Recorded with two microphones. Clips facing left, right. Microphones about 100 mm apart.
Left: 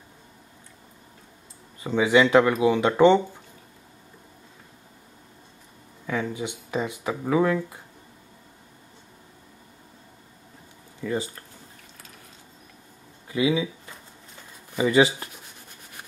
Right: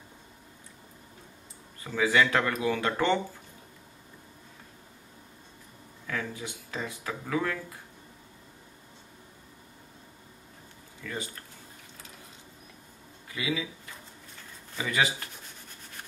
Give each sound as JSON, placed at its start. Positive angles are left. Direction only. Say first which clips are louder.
{"t": 1.8, "sound": "speech", "louder": "left 6 dB", "side_deg": 20}
{"t": 6.0, "sound": "speech", "louder": "left 7 dB", "side_deg": 20}
{"t": 11.0, "sound": "speech", "louder": "left 9 dB", "side_deg": 30}
{"t": 13.3, "sound": "speech", "louder": "left 9 dB", "side_deg": 25}
{"t": 14.7, "sound": "speech", "louder": "left 9 dB", "side_deg": 25}